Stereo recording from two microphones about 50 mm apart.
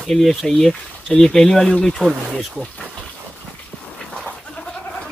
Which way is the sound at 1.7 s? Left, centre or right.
Centre.